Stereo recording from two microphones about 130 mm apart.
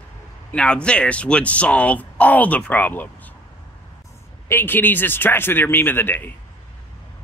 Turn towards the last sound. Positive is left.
turn(degrees=15)  # may be behind; listen again after turning